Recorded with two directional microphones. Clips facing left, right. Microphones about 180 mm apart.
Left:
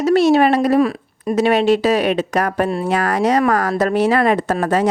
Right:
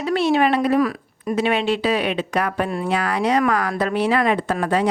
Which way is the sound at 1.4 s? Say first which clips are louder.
Left 6 dB; 40° left (ahead or behind).